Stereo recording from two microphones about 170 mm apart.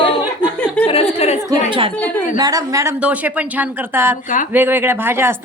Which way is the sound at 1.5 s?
30° right (ahead or behind).